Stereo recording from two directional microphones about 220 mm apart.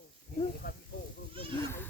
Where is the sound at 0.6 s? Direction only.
40° left (ahead or behind).